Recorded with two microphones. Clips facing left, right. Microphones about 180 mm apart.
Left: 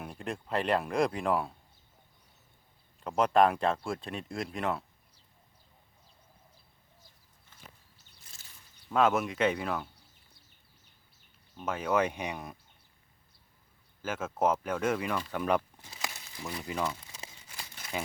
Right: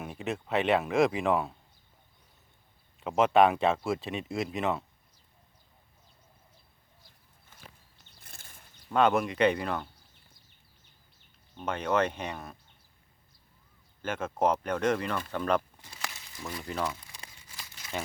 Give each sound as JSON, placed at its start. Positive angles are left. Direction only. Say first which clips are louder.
{"t": 0.0, "sound": "speech", "louder": "right 3 dB", "side_deg": -5}
{"t": 3.0, "sound": "speech", "louder": "right 2 dB", "side_deg": -5}
{"t": 8.2, "sound": "a sound", "louder": "right 5 dB", "side_deg": -55}
{"t": 8.9, "sound": "speech", "louder": "right 2 dB", "side_deg": 0}
{"t": 11.5, "sound": "speech", "louder": "right 1 dB", "side_deg": 5}
{"t": 14.0, "sound": "speech", "louder": "right 1 dB", "side_deg": 5}
{"t": 15.3, "sound": "a sound", "louder": "right 1 dB", "side_deg": 10}
{"t": 16.4, "sound": "speech", "louder": "even", "side_deg": 5}